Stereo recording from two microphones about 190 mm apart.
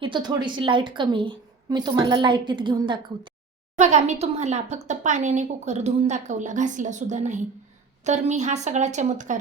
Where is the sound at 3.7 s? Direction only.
40° right (ahead or behind).